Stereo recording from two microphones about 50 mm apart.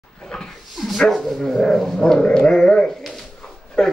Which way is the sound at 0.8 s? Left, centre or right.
Centre.